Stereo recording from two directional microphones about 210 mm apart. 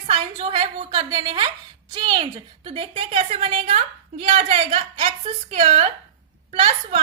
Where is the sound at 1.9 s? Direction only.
20° right (ahead or behind).